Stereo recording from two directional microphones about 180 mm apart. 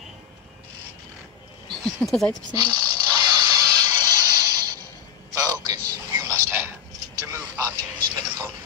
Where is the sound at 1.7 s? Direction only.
Centre (ahead or behind).